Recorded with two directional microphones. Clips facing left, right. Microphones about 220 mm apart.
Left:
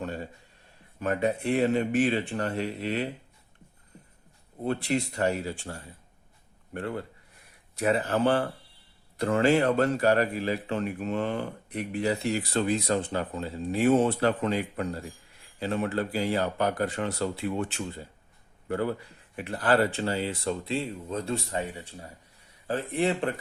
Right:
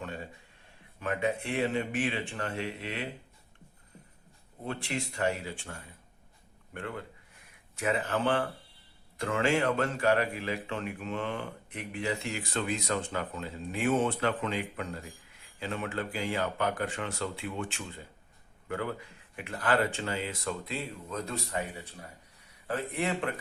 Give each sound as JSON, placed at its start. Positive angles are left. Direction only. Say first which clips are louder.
{"t": 0.0, "sound": "a sound", "louder": "left 5 dB", "side_deg": 40}
{"t": 0.9, "sound": "speech", "louder": "left 4 dB", "side_deg": 40}
{"t": 4.6, "sound": "speech", "louder": "left 8 dB", "side_deg": 40}